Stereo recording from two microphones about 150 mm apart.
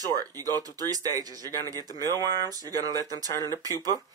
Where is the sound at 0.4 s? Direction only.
25° right (ahead or behind).